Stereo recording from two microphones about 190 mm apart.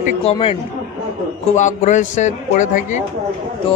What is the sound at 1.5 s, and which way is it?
A man's voice, 40° left (ahead or behind).